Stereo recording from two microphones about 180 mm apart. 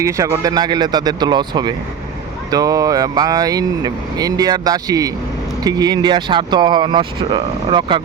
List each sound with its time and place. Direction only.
0.0 s speech: 15° right (ahead or behind)